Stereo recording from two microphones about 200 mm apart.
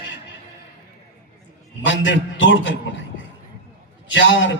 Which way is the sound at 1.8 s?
70° left (ahead or behind).